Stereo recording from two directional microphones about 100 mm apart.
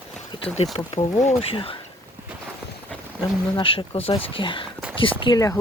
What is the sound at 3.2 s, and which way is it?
Speech, 60° left (ahead or behind).